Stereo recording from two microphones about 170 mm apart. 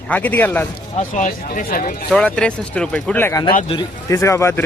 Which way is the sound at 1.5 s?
55° left (ahead or behind).